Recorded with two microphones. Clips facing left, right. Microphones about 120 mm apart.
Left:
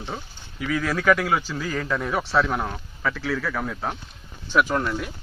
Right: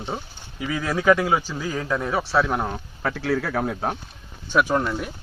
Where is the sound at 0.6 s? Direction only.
20° right (ahead or behind).